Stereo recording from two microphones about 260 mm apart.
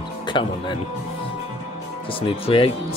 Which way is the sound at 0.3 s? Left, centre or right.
Centre.